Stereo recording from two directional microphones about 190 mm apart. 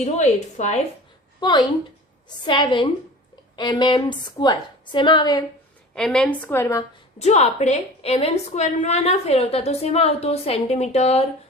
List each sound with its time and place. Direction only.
0.0 s a woman's voice: 35° left (ahead or behind)
1.4 s a woman's voice: 25° left (ahead or behind)
5.9 s a woman's voice: 5° left (ahead or behind)
7.2 s a woman's voice: 35° left (ahead or behind)